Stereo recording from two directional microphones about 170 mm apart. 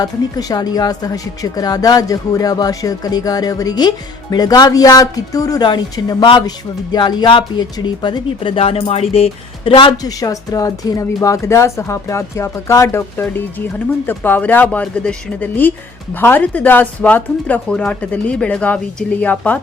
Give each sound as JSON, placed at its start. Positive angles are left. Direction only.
{"t": 0.0, "sound": "speech", "side_deg": 20}